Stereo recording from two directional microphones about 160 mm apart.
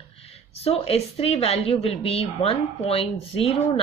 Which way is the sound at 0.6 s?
40° left (ahead or behind).